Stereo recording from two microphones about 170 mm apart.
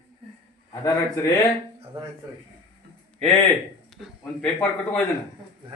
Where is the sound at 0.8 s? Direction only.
20° left (ahead or behind).